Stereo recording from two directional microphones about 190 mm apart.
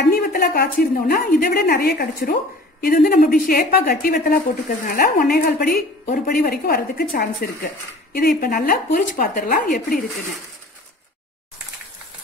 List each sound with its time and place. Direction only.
0.1 s a woman's voice: 50° left (ahead or behind)